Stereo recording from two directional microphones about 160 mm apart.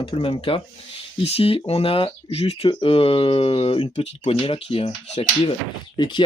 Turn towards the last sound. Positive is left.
turn(degrees=30)  # may be behind; listen again after turning